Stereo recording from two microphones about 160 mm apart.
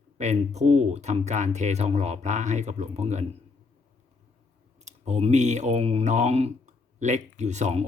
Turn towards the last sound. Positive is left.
turn(degrees=-45)  # may be behind; listen again after turning